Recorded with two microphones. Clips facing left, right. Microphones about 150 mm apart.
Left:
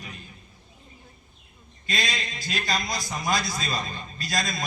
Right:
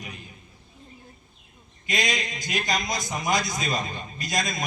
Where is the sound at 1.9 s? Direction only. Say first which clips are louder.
Right 3 dB; 20° right (ahead or behind).